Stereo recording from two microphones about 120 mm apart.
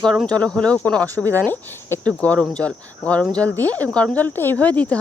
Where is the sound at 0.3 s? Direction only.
10° left (ahead or behind).